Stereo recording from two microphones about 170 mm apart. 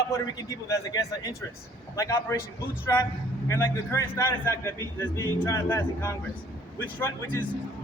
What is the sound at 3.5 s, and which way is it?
A man's voice, 15° left (ahead or behind).